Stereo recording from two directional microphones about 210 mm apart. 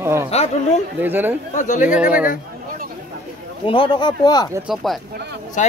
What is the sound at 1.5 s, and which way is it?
Speech, 35° left (ahead or behind).